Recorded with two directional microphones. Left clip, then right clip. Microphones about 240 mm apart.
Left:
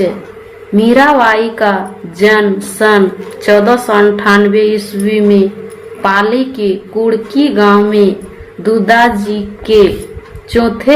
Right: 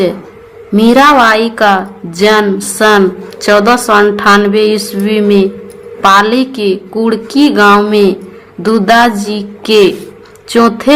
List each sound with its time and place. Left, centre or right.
0.8 s a woman's voice: right